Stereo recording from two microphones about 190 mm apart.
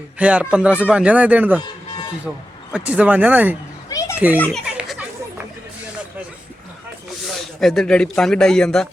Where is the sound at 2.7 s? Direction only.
5° right (ahead or behind).